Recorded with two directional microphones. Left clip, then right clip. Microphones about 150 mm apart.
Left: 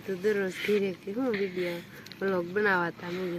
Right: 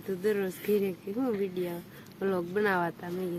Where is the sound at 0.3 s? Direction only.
25° right (ahead or behind).